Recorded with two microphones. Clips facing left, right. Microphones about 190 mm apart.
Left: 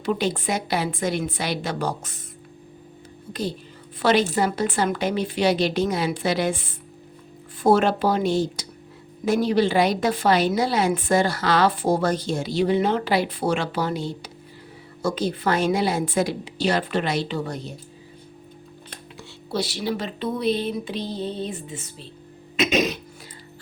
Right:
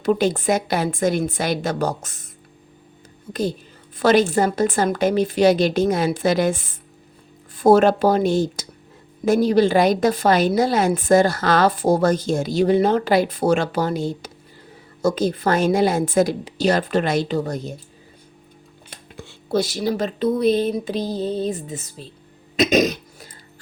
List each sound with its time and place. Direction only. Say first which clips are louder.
0.0 s a woman's voice: right 5 dB; 45° right (ahead or behind)
4.0 s a woman's voice: right 4 dB; 45° right (ahead or behind)
19.1 s speech: right 6 dB; 45° right (ahead or behind)